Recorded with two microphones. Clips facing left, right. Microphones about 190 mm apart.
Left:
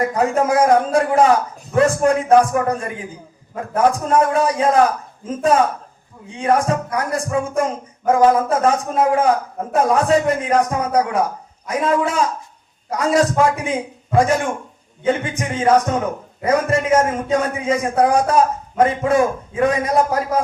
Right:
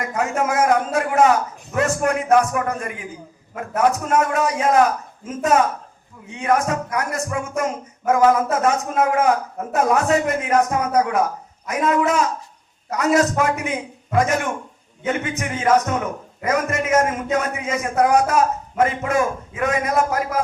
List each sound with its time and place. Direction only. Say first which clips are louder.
0.0 s a man's voice: left 5 dB; 35° left (ahead or behind)